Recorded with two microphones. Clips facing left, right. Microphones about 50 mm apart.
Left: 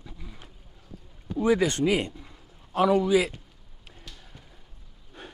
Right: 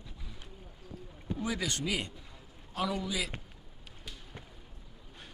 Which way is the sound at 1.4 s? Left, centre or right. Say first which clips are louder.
Left 13 dB; left.